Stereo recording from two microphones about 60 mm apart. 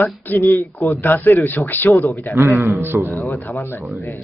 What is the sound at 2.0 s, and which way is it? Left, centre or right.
Speech, left.